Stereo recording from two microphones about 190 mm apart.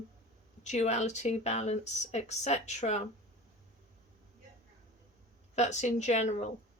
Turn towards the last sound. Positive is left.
turn(degrees=35)  # may be behind; listen again after turning